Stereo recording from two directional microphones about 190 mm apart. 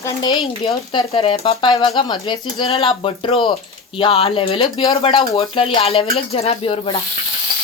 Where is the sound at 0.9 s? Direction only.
30° left (ahead or behind).